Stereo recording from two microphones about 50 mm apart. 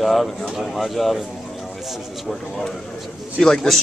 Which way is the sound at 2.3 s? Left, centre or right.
Centre.